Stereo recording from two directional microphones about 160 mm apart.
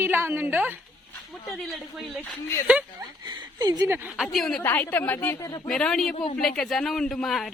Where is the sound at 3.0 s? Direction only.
25° right (ahead or behind).